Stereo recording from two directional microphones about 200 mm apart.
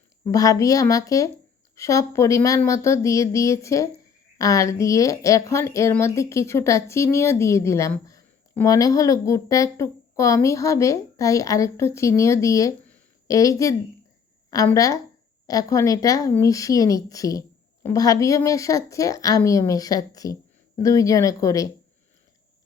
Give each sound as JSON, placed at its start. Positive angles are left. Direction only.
{"t": 0.3, "sound": "a woman's voice", "side_deg": 15}